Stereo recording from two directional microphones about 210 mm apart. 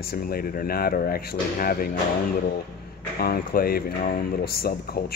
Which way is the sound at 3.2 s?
45° left (ahead or behind).